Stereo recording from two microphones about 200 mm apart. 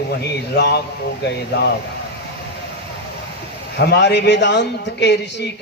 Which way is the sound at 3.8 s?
55° left (ahead or behind).